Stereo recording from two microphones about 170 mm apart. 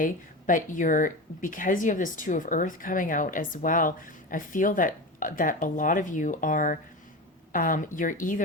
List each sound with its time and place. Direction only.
0.0 s speech: 50° left (ahead or behind)